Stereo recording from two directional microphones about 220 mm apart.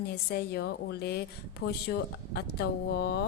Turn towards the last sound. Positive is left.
turn(degrees=45)  # may be behind; listen again after turning